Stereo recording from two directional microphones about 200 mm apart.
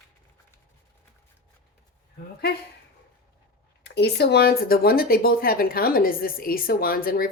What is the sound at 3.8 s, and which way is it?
Speech, 60° left (ahead or behind).